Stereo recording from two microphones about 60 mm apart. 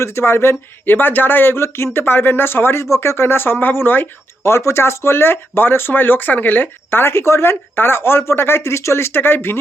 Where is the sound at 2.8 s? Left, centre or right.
Left.